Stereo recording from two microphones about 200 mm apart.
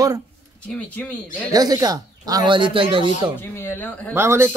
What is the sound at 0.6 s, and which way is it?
Speech, 5° left (ahead or behind).